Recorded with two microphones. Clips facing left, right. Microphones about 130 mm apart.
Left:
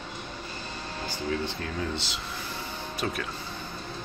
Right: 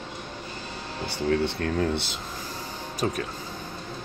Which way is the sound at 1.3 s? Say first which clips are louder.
Right 8 dB; 60° right (ahead or behind).